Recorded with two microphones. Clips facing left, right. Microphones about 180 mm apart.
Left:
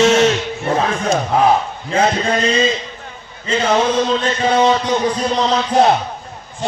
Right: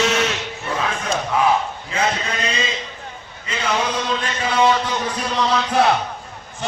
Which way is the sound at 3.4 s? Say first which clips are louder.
Left 7 dB; 35° left (ahead or behind).